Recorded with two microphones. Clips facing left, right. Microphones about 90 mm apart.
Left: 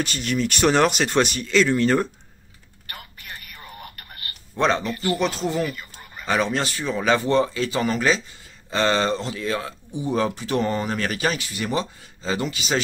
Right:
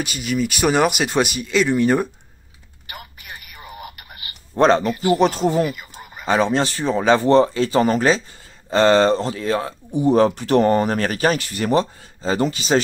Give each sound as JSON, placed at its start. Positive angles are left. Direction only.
{"t": 0.0, "sound": "speech", "side_deg": -5}
{"t": 2.9, "sound": "telephone", "side_deg": -10}
{"t": 4.6, "sound": "speech", "side_deg": -40}
{"t": 5.7, "sound": "fowl", "side_deg": -10}
{"t": 6.2, "sound": "speech", "side_deg": -30}
{"t": 9.9, "sound": "speech", "side_deg": -55}